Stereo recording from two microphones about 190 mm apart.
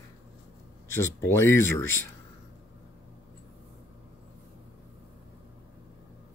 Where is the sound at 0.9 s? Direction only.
15° left (ahead or behind).